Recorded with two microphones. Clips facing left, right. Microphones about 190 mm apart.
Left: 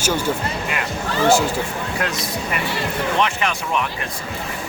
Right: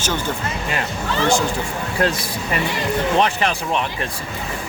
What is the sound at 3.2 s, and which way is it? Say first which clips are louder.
Speech: right 2 dB; 35° right (ahead or behind).